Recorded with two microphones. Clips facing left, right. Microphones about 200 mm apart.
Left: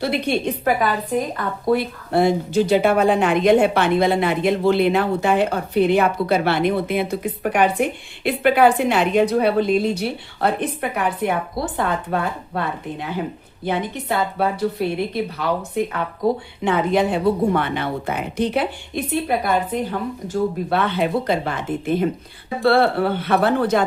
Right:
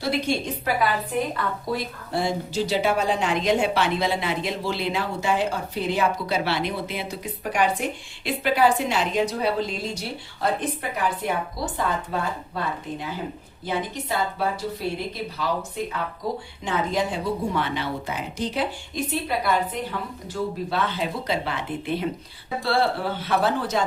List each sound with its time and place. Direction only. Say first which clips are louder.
0.0 s a woman's voice: left 4 dB; 60° left (ahead or behind)
1.3 s speech: left 5 dB; 45° left (ahead or behind)
1.7 s a woman's voice: left 11 dB; 60° left (ahead or behind)
22.6 s a woman's voice: left 7 dB; 60° left (ahead or behind)